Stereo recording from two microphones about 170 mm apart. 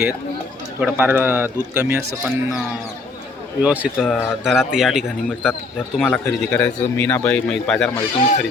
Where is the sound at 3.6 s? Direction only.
5° right (ahead or behind).